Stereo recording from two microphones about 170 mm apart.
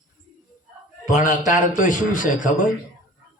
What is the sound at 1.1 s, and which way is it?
Speech, 50° left (ahead or behind).